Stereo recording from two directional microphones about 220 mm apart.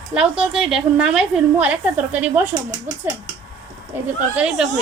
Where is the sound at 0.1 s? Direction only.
5° right (ahead or behind).